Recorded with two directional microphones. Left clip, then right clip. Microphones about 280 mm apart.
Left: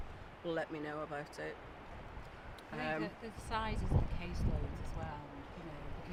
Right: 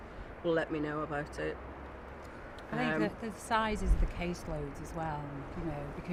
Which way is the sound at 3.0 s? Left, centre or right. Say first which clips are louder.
Right 8 dB; right.